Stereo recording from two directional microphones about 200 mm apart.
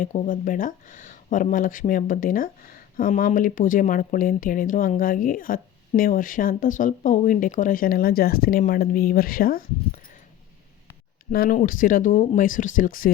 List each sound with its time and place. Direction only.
0.0 s speech: 40° left (ahead or behind)
11.3 s speech: 45° left (ahead or behind)